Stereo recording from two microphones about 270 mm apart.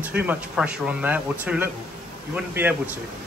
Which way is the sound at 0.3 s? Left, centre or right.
Centre.